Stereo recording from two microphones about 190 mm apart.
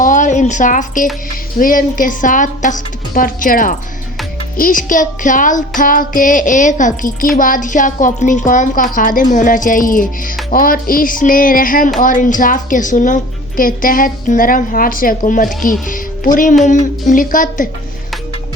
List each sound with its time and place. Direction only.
0.0 s a sound: 40° left (ahead or behind)
1.5 s child singing: 45° left (ahead or behind)
15.9 s speech: 45° left (ahead or behind)
17.1 s child singing: 45° left (ahead or behind)